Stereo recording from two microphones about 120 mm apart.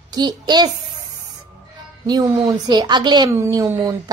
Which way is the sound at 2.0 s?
35° right (ahead or behind).